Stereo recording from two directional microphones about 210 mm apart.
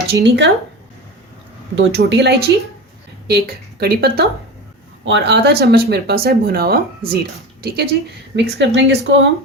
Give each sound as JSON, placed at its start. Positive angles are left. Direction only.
{"t": 0.1, "sound": "speech", "side_deg": -55}
{"t": 1.7, "sound": "speech", "side_deg": -55}
{"t": 8.4, "sound": "speech", "side_deg": -55}